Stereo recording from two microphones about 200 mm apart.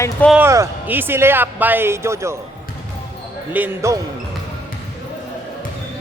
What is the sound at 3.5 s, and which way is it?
Speech, 10° right (ahead or behind).